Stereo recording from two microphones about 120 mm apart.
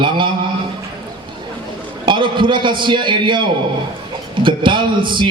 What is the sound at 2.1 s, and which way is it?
A man's voice, 45° right (ahead or behind).